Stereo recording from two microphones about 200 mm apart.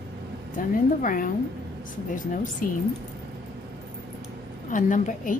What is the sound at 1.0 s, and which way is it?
A woman's voice, 45° left (ahead or behind).